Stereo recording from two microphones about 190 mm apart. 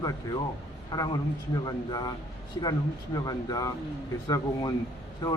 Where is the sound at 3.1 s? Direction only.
20° left (ahead or behind).